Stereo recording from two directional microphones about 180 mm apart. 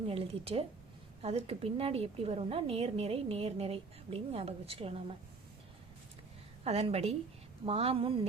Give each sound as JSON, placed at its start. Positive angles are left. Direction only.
{"t": 0.1, "sound": "a woman's voice", "side_deg": -30}
{"t": 6.7, "sound": "a woman's voice", "side_deg": -35}